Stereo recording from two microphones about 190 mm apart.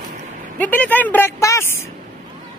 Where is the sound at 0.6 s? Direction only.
10° left (ahead or behind).